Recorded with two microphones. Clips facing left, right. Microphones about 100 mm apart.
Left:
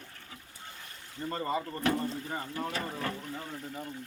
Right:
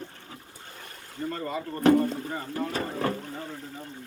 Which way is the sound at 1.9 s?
50° right (ahead or behind).